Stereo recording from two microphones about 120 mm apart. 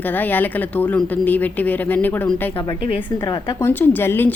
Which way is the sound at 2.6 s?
40° left (ahead or behind).